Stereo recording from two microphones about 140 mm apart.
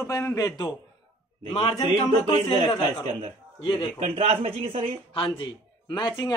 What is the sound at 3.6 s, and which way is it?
Speech, 35° left (ahead or behind).